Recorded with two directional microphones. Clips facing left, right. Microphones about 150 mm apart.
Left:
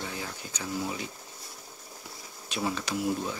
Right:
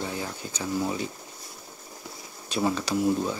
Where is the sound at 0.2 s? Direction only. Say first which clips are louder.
Right 5 dB; 30° right (ahead or behind).